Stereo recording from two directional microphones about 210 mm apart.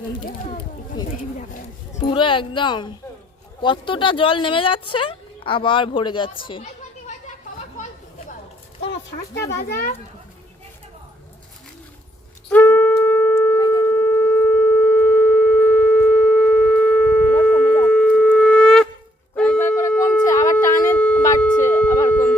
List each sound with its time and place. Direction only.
1.4 s speech: 35° left (ahead or behind)
2.0 s speech: 25° left (ahead or behind)
9.6 s speech: 50° left (ahead or behind)
12.5 s wind instrument: 10° left (ahead or behind)
13.6 s shofar: 20° left (ahead or behind)
17.4 s sine wave: 5° left (ahead or behind)
17.7 s shofar: 5° left (ahead or behind)
19.4 s a sound: 10° left (ahead or behind)
20.8 s shofar: 5° left (ahead or behind)
21.4 s a sound: 10° left (ahead or behind)